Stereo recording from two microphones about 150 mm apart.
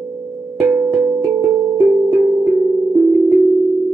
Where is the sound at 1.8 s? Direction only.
Centre (ahead or behind).